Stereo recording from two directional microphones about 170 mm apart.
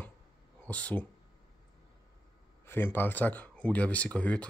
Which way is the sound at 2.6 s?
10° left (ahead or behind).